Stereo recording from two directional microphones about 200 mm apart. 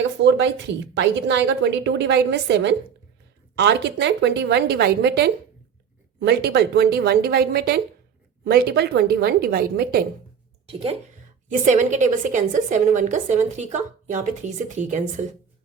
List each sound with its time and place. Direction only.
0.0 s a woman's voice: 65° right (ahead or behind)
10.7 s a woman's voice: 30° right (ahead or behind)